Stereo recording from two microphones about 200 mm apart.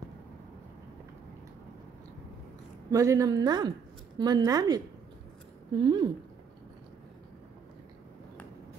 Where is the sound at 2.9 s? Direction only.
15° right (ahead or behind).